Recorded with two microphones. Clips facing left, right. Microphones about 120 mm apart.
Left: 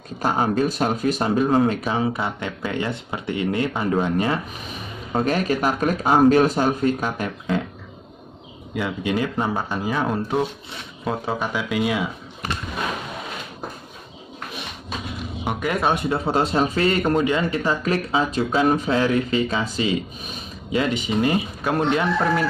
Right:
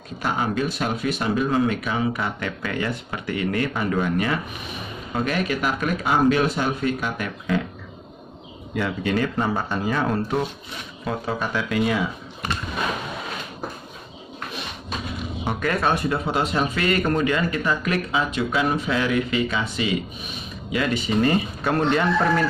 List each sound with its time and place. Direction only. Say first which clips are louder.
0.2 s speech: left 4 dB; 35° left (ahead or behind)
8.7 s speech: even; 10° left (ahead or behind)
15.4 s speech: left 1 dB; 15° left (ahead or behind)
16.3 s speech: left 5 dB; 35° left (ahead or behind); by 22.5 s 5° left (ahead or behind)